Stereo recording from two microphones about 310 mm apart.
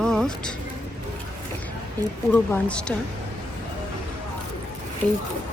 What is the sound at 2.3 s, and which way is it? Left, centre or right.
Speech, centre.